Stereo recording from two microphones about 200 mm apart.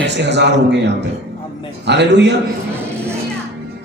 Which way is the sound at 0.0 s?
60° right (ahead or behind).